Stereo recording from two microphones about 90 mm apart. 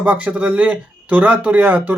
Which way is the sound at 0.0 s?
15° right (ahead or behind).